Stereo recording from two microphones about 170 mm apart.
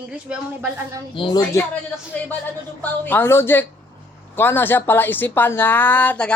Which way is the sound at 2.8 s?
10° left (ahead or behind).